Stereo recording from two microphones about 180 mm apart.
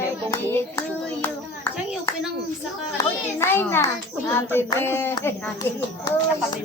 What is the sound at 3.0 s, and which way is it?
Children playing, 15° left (ahead or behind).